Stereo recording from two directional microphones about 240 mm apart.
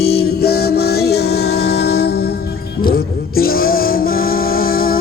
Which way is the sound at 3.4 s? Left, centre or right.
Left.